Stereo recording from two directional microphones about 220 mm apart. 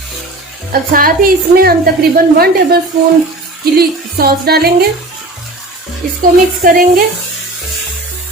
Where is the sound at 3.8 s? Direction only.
45° right (ahead or behind).